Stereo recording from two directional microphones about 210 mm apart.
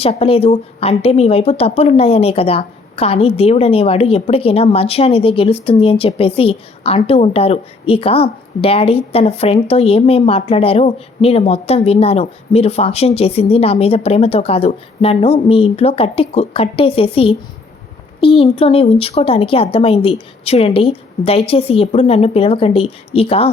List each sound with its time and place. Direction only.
0.0 s a woman's voice: 25° left (ahead or behind)